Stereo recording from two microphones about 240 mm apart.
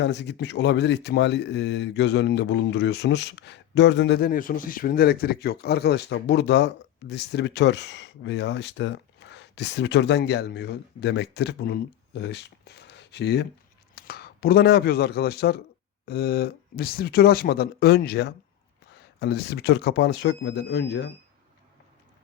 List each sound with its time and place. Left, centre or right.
0.0 s a man's voice: left